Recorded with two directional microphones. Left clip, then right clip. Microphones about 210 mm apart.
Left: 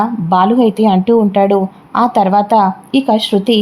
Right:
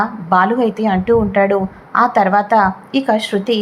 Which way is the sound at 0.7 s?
50° left (ahead or behind).